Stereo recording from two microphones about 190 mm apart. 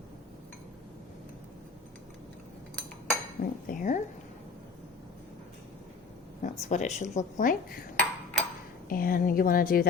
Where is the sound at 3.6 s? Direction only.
45° left (ahead or behind).